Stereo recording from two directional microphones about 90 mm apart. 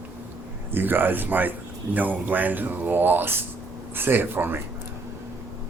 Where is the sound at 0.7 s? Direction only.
20° right (ahead or behind).